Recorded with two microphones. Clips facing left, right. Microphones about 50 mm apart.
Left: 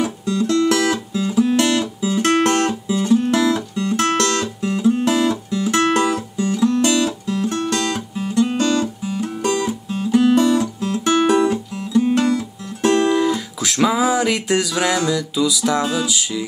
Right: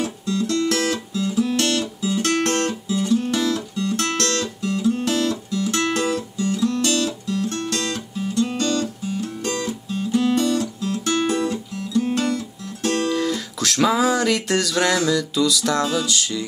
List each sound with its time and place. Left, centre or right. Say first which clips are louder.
0.0 s music: left 3 dB; left
2.9 s music: left 4 dB; left
13.1 s music: left 5 dB; centre